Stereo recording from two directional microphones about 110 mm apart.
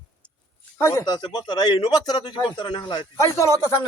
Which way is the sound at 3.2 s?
30° left (ahead or behind).